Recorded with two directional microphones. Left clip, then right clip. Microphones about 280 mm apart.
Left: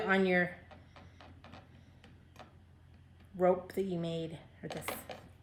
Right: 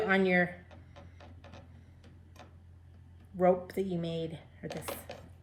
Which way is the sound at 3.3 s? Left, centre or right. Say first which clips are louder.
Right 2 dB; centre.